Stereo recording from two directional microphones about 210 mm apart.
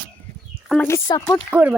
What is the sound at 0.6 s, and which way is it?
Speech, 10° left (ahead or behind).